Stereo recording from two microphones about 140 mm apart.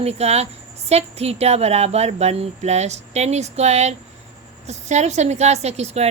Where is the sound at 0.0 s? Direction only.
50° right (ahead or behind).